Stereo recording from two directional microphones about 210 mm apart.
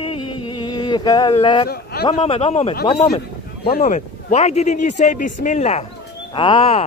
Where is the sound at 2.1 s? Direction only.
25° left (ahead or behind).